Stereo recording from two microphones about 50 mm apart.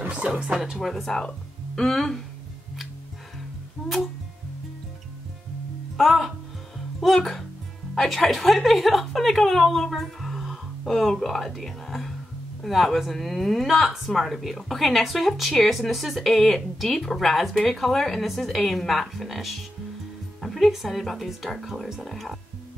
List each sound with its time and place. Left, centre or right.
0.0 s music: right
0.7 s speech: centre
5.9 s speech: centre